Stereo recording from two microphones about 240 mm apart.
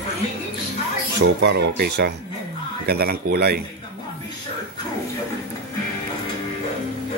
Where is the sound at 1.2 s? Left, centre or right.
Right.